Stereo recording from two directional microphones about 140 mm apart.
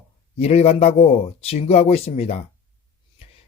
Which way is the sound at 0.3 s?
45° left (ahead or behind).